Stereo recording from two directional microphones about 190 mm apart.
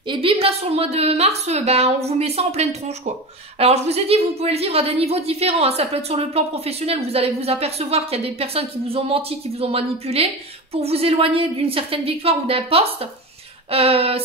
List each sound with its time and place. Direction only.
0.1 s a woman's voice: 30° right (ahead or behind)